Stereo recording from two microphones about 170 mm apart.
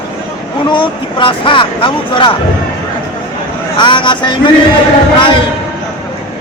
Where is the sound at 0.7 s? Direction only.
30° left (ahead or behind).